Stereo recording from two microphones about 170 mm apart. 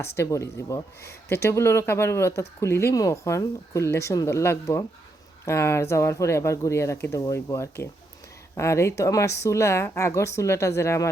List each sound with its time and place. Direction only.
0.0 s speech: 15° left (ahead or behind)